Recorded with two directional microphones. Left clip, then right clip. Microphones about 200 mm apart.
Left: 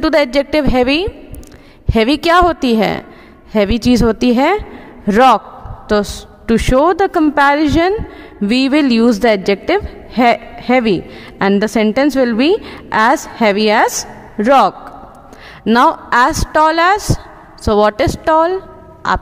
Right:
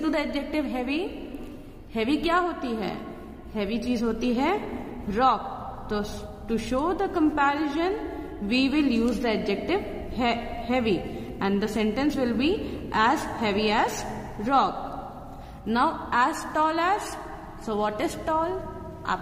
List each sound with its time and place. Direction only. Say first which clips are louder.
0.0 s a woman's voice: left 15 dB; 55° left (ahead or behind)